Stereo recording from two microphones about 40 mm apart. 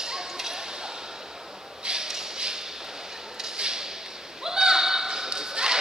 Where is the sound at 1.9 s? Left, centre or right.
Centre.